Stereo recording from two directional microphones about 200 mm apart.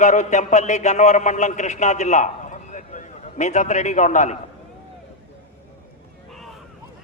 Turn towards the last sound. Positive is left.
turn(degrees=0)  # may be behind; listen again after turning